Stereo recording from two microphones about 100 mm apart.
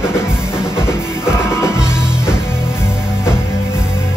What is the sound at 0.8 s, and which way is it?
Music, 25° left (ahead or behind).